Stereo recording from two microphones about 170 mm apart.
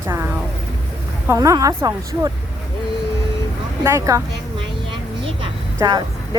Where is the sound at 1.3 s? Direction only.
20° right (ahead or behind).